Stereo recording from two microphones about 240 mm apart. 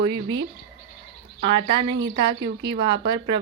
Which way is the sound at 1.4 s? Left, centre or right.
Right.